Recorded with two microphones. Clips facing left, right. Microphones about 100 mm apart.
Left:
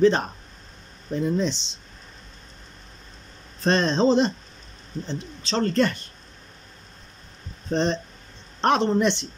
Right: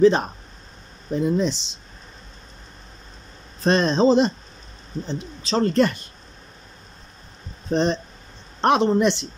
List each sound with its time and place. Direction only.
0.0 s speech: 15° right (ahead or behind)
3.6 s speech: 15° right (ahead or behind)
7.7 s speech: 15° right (ahead or behind)